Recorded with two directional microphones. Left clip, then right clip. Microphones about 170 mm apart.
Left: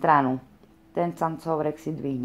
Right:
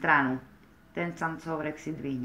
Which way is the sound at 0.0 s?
35° left (ahead or behind).